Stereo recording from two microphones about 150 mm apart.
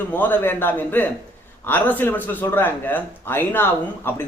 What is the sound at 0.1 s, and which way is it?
Speech, 10° left (ahead or behind).